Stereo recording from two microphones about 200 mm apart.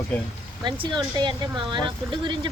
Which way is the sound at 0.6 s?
20° right (ahead or behind).